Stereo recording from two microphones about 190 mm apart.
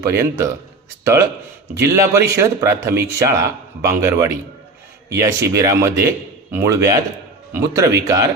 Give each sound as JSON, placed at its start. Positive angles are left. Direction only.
{"t": 0.0, "sound": "a man's voice", "side_deg": -15}